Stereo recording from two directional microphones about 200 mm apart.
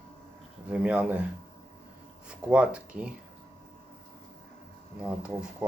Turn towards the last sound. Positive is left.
turn(degrees=-5)  # may be behind; listen again after turning